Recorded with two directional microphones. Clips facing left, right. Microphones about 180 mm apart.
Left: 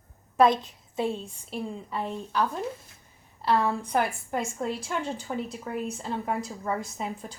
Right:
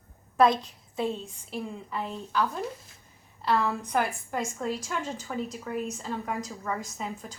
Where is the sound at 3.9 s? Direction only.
25° left (ahead or behind).